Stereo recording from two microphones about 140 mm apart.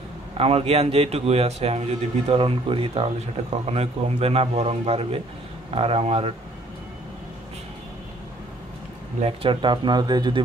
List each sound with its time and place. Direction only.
0.4 s a man's voice: 45° right (ahead or behind)
9.2 s speech: 40° right (ahead or behind)